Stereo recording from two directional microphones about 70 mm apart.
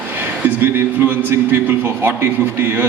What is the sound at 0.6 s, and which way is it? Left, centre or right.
A man's voice, right.